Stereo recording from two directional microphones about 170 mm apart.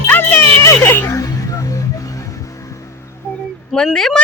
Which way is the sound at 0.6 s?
15° left (ahead or behind).